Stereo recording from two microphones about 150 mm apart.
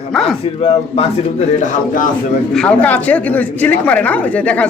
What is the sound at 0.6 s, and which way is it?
Speech, 45° left (ahead or behind).